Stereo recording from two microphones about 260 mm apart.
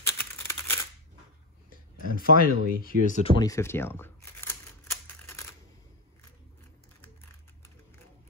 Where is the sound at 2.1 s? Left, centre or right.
Left.